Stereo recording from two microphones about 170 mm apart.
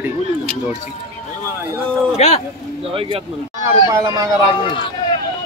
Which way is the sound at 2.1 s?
35° left (ahead or behind).